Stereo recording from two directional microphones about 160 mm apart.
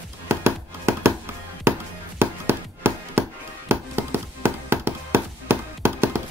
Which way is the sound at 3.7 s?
15° right (ahead or behind).